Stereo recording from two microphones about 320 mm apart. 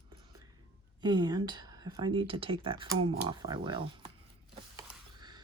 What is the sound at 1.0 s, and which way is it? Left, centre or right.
Speech, centre.